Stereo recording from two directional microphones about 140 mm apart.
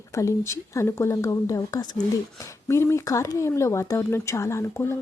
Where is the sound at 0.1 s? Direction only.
20° left (ahead or behind).